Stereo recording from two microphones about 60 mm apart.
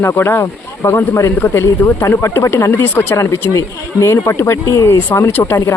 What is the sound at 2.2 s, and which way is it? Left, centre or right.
Speech, left.